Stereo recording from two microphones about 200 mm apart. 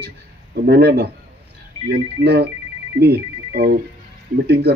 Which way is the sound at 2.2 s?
55° right (ahead or behind).